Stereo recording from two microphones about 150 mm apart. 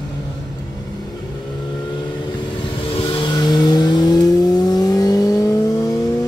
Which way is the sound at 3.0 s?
35° left (ahead or behind).